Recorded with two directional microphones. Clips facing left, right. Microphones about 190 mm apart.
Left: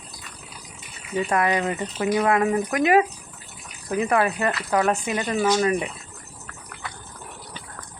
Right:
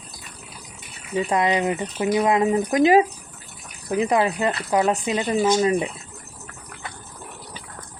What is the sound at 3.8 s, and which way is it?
Speech, 15° right (ahead or behind).